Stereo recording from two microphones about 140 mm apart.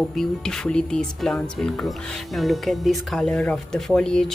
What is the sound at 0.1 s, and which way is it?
Speech, 5° left (ahead or behind).